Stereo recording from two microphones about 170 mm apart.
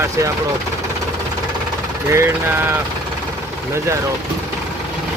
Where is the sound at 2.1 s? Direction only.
15° right (ahead or behind).